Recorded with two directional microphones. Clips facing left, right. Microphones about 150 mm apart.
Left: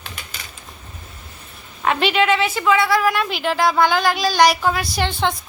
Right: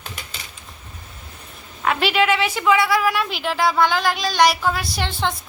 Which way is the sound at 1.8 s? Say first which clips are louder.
Left 1 dB; 5° right (ahead or behind).